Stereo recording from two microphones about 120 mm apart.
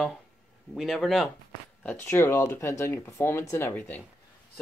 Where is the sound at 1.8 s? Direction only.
20° left (ahead or behind).